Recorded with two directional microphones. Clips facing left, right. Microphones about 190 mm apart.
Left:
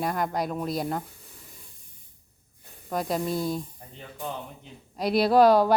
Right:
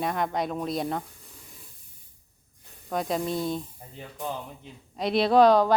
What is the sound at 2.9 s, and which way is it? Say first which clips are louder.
Speech: even; centre (ahead or behind).